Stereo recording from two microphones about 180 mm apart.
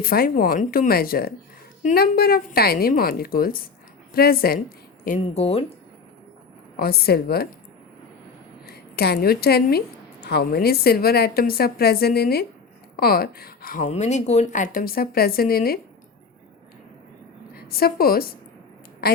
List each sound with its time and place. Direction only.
0.0 s a woman's voice: 55° left (ahead or behind)
5.2 s speech: 35° left (ahead or behind)
6.7 s a woman's voice: 60° left (ahead or behind)
8.6 s a woman's voice: 60° left (ahead or behind)
13.8 s speech: 40° left (ahead or behind); by 15.8 s 55° left (ahead or behind)
17.5 s a woman's voice: 55° left (ahead or behind)